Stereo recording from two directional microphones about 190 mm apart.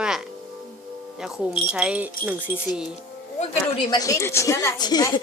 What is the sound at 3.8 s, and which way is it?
Speech, 20° left (ahead or behind).